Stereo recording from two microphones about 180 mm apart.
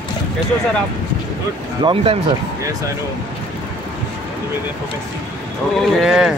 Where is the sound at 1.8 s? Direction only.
25° right (ahead or behind).